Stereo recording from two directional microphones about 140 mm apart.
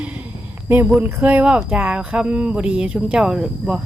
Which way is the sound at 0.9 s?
10° right (ahead or behind).